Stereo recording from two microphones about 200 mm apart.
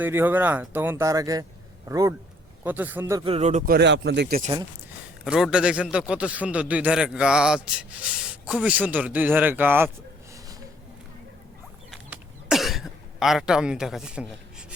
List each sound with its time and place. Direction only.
0.0 s speech: 10° right (ahead or behind)
3.2 s speech: 30° right (ahead or behind)
3.7 s speech: 60° right (ahead or behind)
4.4 s speech: 35° right (ahead or behind)
5.2 s a man's voice: 5° right (ahead or behind)
11.9 s throat clearing: centre (ahead or behind)